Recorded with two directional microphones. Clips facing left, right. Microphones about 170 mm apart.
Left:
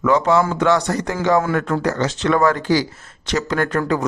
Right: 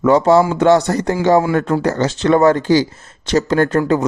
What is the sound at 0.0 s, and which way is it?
A man's voice, 35° right (ahead or behind).